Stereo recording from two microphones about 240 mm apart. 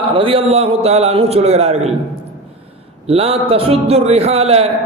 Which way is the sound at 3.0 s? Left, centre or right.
Right.